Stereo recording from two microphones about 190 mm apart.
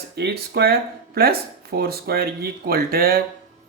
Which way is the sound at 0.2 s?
55° right (ahead or behind).